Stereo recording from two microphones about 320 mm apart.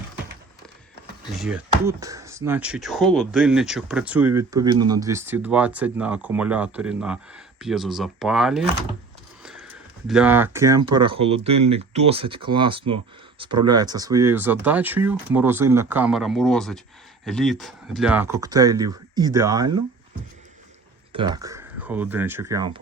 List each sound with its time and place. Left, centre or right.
1.3 s speech: centre
9.4 s a sound: centre
10.1 s speech: centre
21.1 s speech: centre